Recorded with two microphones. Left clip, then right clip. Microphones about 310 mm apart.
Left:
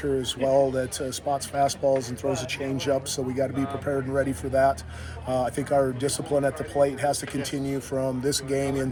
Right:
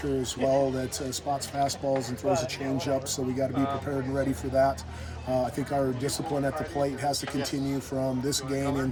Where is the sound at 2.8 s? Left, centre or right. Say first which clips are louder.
Left 5 dB; centre.